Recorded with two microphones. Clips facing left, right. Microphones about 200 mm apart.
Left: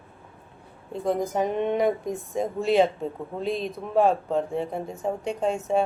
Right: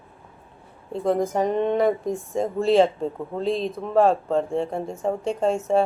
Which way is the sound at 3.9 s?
5° left (ahead or behind).